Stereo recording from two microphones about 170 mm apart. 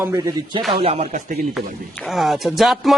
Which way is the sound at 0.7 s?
35° right (ahead or behind).